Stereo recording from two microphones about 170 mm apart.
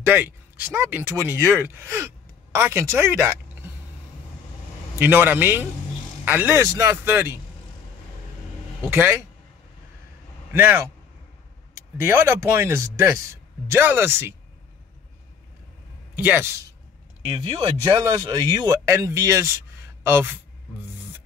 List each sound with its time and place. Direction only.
0.0 s a man's voice: 15° right (ahead or behind)
4.9 s a man's voice: 10° right (ahead or behind)
8.8 s a man's voice: 10° right (ahead or behind)
10.5 s a man's voice: 10° right (ahead or behind)
16.2 s a man's voice: 10° right (ahead or behind)
17.4 s speech: 25° right (ahead or behind)